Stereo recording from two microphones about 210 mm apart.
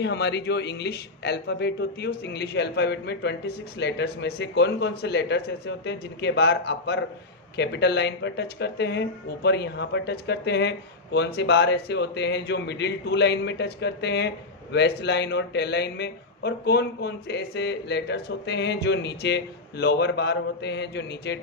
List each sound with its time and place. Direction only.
0.0 s speech: 55° left (ahead or behind)